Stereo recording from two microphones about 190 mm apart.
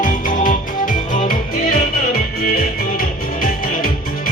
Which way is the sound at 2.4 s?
50° left (ahead or behind).